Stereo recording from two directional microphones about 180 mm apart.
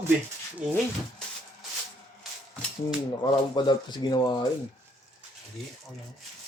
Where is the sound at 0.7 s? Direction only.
5° left (ahead or behind).